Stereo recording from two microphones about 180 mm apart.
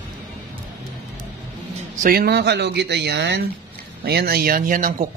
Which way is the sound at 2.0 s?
55° right (ahead or behind).